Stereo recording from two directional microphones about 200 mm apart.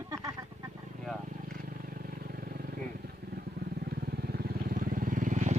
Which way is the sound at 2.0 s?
50° right (ahead or behind).